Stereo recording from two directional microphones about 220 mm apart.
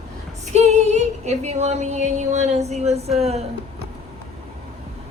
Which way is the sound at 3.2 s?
30° right (ahead or behind).